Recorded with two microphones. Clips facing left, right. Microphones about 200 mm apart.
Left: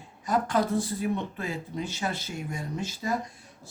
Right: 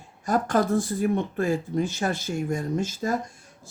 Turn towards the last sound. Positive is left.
turn(degrees=-45)  # may be behind; listen again after turning